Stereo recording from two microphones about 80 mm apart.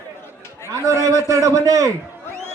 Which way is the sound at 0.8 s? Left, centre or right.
Right.